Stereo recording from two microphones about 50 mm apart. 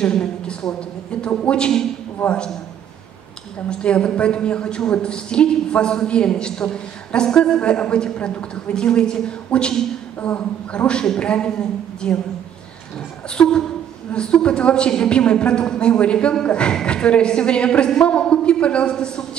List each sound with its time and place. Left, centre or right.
0.0 s a woman's voice: centre
3.8 s a woman's voice: left
13.3 s a woman's voice: centre